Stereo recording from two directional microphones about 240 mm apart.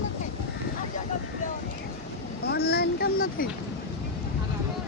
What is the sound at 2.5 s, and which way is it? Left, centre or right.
Boat, left.